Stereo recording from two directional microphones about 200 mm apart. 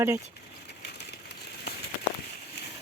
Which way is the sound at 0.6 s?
55° left (ahead or behind).